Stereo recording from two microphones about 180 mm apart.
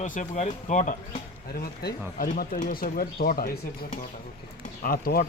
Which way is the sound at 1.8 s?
55° left (ahead or behind).